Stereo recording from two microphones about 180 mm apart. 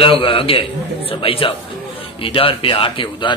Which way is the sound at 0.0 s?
30° left (ahead or behind).